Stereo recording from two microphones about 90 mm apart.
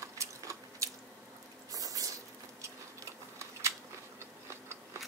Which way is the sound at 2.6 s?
35° right (ahead or behind).